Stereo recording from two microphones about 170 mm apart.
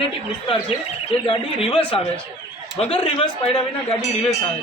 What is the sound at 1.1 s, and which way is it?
Speech, 30° left (ahead or behind).